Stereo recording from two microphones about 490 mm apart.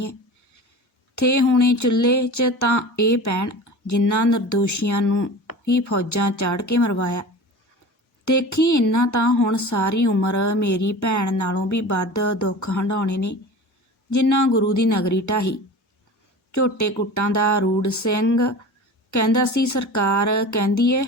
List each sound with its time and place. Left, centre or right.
1.1 s speech: left
5.5 s a sound: left
6.0 s speech: left
8.2 s speech: left